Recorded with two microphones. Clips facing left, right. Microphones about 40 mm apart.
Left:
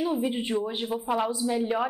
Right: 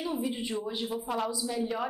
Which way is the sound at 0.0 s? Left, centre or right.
Left.